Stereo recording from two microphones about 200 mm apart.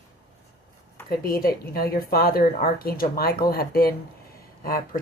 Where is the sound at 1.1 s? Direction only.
50° left (ahead or behind).